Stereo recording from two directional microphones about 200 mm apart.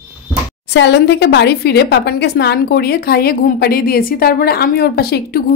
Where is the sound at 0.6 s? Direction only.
60° left (ahead or behind).